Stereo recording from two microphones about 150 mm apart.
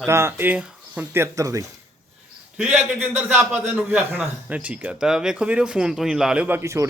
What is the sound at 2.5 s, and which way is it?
A man's voice, 5° right (ahead or behind).